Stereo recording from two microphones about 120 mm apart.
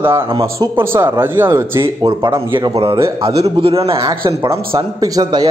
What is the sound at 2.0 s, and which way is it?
Speech, 35° right (ahead or behind).